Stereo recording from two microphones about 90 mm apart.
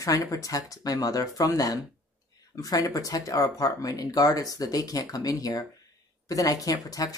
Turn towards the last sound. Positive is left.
turn(degrees=40)  # may be behind; listen again after turning